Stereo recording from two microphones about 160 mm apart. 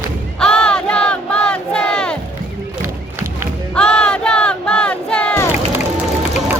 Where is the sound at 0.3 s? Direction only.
5° left (ahead or behind).